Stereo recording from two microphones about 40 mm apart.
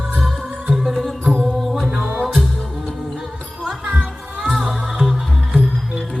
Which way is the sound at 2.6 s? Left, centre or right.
Centre.